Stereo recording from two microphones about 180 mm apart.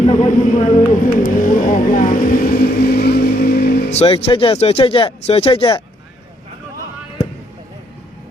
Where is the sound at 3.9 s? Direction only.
35° left (ahead or behind).